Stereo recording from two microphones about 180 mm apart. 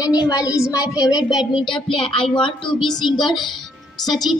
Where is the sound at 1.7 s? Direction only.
30° left (ahead or behind).